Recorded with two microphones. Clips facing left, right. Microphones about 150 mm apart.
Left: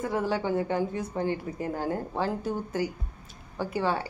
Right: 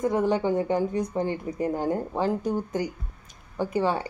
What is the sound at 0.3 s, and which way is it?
Speech, 15° right (ahead or behind).